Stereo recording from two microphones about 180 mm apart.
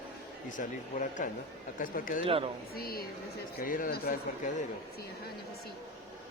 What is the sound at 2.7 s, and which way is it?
Speech, 55° left (ahead or behind).